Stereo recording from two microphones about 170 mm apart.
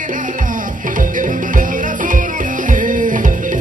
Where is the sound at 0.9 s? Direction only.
50° right (ahead or behind).